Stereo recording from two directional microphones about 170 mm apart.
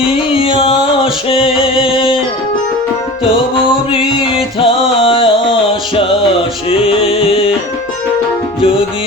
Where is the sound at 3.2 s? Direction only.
30° left (ahead or behind).